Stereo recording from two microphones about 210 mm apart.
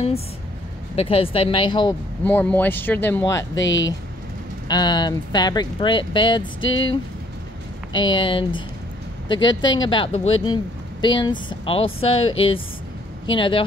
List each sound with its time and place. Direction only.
0.9 s speech: 25° left (ahead or behind)
2.2 s speech: 10° left (ahead or behind)
3.5 s speech: 60° left (ahead or behind)
4.6 s speech: 20° left (ahead or behind)
6.6 s speech: 65° left (ahead or behind)
7.9 s speech: 20° left (ahead or behind)